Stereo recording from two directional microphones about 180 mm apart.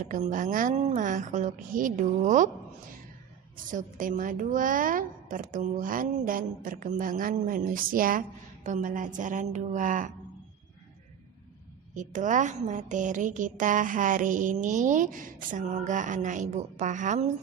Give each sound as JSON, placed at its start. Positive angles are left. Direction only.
{"t": 0.0, "sound": "a woman's voice", "side_deg": -45}
{"t": 3.7, "sound": "a woman's voice", "side_deg": -45}
{"t": 11.9, "sound": "a woman's voice", "side_deg": -45}